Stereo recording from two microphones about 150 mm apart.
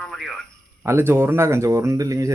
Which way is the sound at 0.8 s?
15° right (ahead or behind).